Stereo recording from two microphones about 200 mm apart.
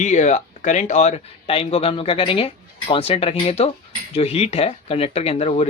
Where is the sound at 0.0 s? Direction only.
35° left (ahead or behind).